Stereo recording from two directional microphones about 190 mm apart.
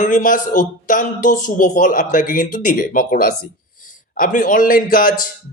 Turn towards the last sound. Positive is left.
turn(degrees=45)  # may be behind; listen again after turning